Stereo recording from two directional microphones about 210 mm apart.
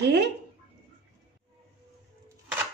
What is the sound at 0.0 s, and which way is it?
Speech, 55° right (ahead or behind).